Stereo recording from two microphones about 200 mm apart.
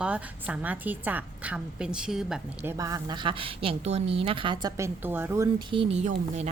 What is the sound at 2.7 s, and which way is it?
A woman's voice, 20° right (ahead or behind).